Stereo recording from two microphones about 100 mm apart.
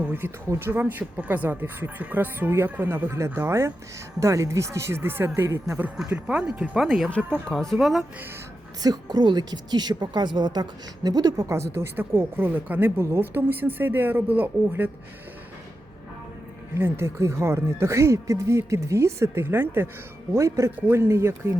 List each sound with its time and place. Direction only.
0.0 s a woman's voice: 20° right (ahead or behind)
6.0 s speech: 10° right (ahead or behind)
7.1 s speech: 10° left (ahead or behind)
8.8 s a woman's voice: 45° right (ahead or behind); by 14.8 s 20° right (ahead or behind)
16.7 s a woman's voice: 25° right (ahead or behind)
20.3 s a woman's voice: 30° right (ahead or behind)